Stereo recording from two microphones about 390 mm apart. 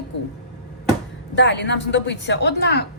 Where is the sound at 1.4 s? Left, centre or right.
Left.